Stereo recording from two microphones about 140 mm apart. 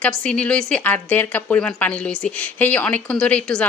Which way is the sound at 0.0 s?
10° left (ahead or behind).